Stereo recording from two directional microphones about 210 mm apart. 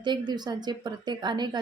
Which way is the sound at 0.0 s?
20° right (ahead or behind).